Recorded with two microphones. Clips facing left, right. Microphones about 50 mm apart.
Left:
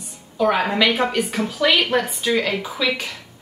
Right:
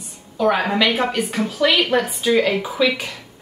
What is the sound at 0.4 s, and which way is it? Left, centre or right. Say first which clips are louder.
Speech: even; centre.